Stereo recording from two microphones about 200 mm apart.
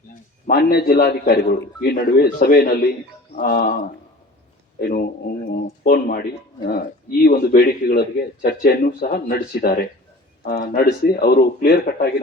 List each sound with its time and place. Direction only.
0.4 s speech: 50° left (ahead or behind)